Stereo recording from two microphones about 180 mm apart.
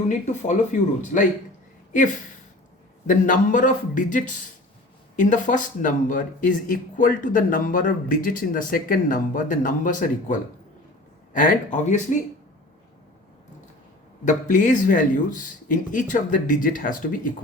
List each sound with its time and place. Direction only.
0.1 s speech: 40° left (ahead or behind)
3.1 s speech: 45° left (ahead or behind)
14.3 s speech: 45° left (ahead or behind)